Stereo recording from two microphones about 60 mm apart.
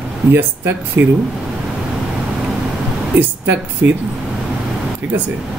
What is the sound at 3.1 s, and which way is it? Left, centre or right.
Speech, right.